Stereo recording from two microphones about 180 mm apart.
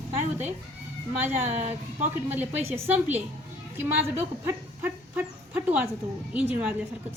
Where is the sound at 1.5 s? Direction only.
40° right (ahead or behind).